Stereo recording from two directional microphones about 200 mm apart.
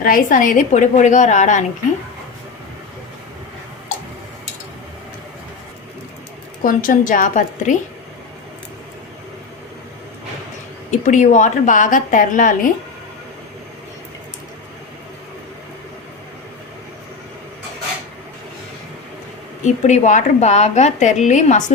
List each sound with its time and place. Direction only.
0.0 s a woman's voice: 45° left (ahead or behind)
6.6 s a woman's voice: 45° left (ahead or behind)
11.0 s a woman's voice: 40° left (ahead or behind)
19.6 s a woman's voice: 35° left (ahead or behind)